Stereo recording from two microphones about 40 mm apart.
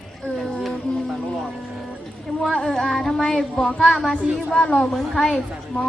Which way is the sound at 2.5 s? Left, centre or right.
Centre.